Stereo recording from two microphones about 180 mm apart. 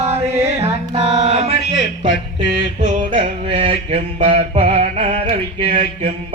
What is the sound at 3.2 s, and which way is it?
Mantra, 35° right (ahead or behind).